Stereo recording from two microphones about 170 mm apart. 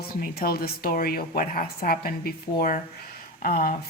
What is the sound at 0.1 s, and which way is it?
A woman's voice, 60° left (ahead or behind).